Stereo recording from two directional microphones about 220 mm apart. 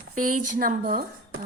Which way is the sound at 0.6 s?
40° right (ahead or behind).